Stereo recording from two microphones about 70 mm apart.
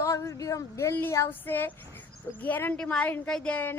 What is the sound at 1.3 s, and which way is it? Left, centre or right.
Speech, left.